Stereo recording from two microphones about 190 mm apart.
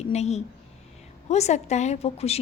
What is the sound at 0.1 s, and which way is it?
A woman's voice, 35° left (ahead or behind).